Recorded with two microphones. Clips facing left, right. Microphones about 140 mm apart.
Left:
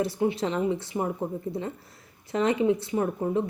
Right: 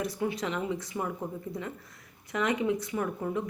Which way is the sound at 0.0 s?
30° left (ahead or behind).